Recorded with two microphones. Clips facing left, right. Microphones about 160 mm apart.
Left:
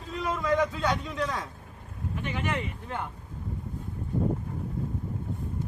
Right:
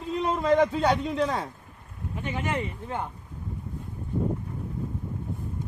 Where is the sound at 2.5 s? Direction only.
20° right (ahead or behind).